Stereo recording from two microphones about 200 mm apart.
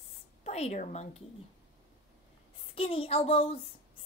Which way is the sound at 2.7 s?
30° left (ahead or behind).